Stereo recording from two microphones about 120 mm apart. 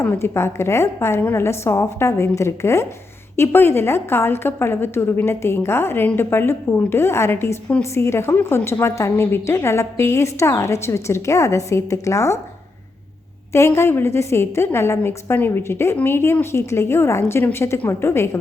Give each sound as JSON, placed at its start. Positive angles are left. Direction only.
{"t": 0.0, "sound": "a woman's voice", "side_deg": 20}
{"t": 13.5, "sound": "a woman's voice", "side_deg": 25}